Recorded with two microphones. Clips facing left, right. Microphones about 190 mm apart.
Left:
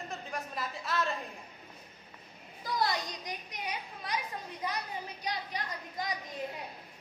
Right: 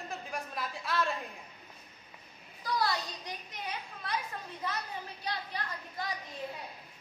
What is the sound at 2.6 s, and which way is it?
A child's voice, 20° left (ahead or behind).